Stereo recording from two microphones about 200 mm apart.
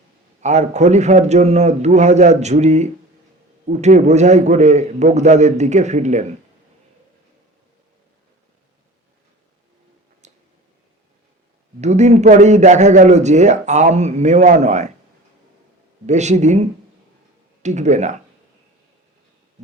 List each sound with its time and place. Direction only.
0.4 s a man's voice: 35° right (ahead or behind)
10.2 s a sound: 35° right (ahead or behind)
11.8 s a man's voice: 35° right (ahead or behind)
16.0 s a man's voice: 35° right (ahead or behind)